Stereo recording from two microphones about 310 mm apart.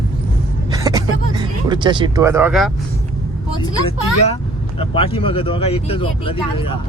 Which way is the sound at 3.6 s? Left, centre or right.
Centre.